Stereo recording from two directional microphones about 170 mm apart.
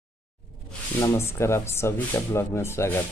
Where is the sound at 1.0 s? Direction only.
15° left (ahead or behind).